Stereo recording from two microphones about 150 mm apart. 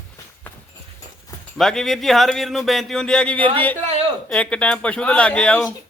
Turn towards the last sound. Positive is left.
turn(degrees=5)  # may be behind; listen again after turning